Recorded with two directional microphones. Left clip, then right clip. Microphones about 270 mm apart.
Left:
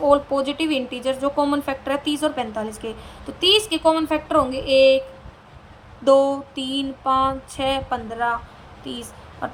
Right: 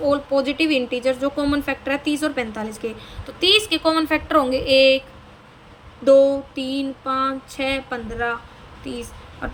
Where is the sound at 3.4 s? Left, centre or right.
Centre.